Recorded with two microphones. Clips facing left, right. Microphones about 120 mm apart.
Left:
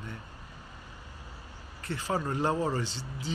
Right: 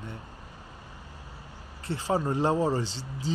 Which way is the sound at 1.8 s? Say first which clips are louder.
Right 4 dB; 30° right (ahead or behind).